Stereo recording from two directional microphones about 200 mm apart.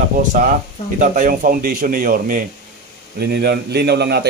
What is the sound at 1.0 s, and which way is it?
A man's voice, 45° right (ahead or behind).